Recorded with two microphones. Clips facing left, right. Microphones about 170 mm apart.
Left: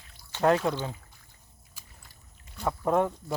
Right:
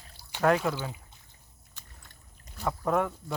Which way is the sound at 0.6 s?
5° right (ahead or behind).